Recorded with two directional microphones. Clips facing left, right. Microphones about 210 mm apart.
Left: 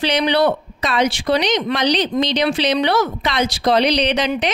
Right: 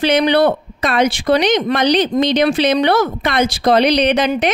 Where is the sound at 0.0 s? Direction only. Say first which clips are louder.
Right 4 dB; 50° right (ahead or behind).